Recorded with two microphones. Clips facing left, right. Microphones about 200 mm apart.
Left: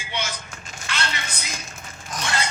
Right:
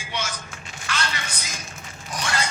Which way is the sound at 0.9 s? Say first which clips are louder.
Even; 25° left (ahead or behind).